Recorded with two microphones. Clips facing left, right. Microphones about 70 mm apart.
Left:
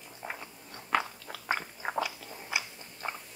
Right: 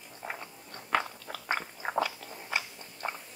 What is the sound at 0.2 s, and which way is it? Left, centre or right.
Biting, centre.